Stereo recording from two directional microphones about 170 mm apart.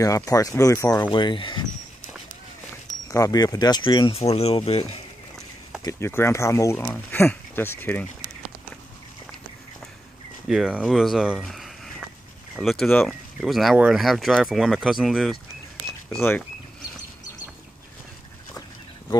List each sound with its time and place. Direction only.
0.0 s speech: 20° left (ahead or behind)
3.1 s speech: 20° left (ahead or behind)
5.8 s speech: 15° left (ahead or behind)
10.5 s speech: 5° right (ahead or behind)
16.2 s speech: 10° left (ahead or behind)